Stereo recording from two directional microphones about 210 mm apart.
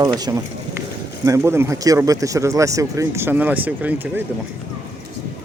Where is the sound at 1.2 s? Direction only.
15° right (ahead or behind).